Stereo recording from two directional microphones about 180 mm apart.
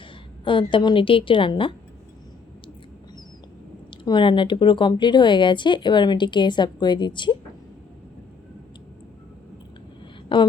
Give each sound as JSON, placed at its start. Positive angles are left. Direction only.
{"t": 0.4, "sound": "speech", "side_deg": 25}
{"t": 4.0, "sound": "speech", "side_deg": 25}
{"t": 10.3, "sound": "a woman's voice", "side_deg": 30}